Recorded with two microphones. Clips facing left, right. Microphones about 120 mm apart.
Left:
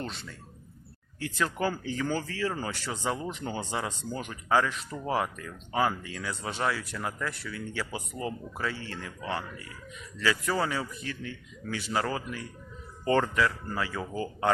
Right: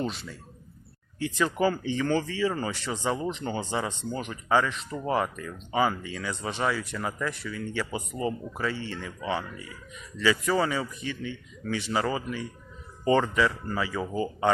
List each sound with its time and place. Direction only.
0.0 s speech: 5° right (ahead or behind)